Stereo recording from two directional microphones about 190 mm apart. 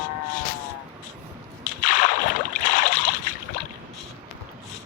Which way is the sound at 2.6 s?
40° left (ahead or behind).